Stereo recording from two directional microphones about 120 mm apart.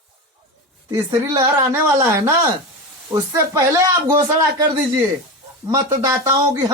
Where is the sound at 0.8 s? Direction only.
25° right (ahead or behind).